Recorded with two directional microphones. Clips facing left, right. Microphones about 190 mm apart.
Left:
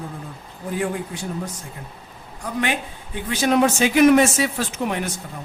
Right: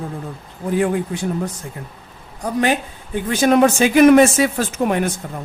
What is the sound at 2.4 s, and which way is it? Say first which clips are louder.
Speech: right 6 dB; 40° right (ahead or behind).